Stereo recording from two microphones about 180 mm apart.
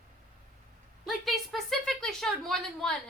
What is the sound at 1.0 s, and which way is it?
A woman's voice, centre (ahead or behind).